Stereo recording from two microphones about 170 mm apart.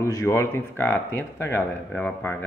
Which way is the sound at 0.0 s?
15° left (ahead or behind).